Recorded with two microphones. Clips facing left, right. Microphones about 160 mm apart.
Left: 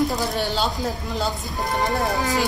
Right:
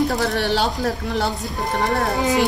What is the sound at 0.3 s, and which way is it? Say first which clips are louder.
Speech: right 3 dB; 75° right (ahead or behind).